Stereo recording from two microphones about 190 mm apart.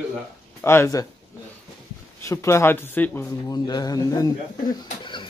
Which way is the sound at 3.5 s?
20° left (ahead or behind).